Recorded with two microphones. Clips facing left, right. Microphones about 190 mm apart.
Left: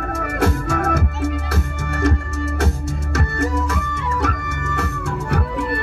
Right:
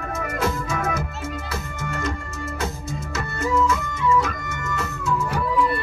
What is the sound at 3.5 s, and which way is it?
Music, 65° left (ahead or behind).